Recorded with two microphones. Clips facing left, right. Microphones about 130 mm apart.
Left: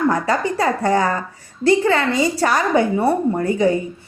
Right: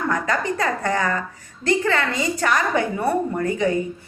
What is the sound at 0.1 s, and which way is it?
A woman's voice, 35° left (ahead or behind).